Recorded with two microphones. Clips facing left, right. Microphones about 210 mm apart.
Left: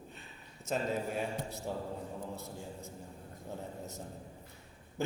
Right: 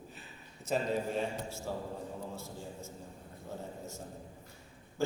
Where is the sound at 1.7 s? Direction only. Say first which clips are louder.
Even; 20° left (ahead or behind).